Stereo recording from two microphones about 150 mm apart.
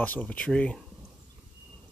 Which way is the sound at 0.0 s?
10° left (ahead or behind).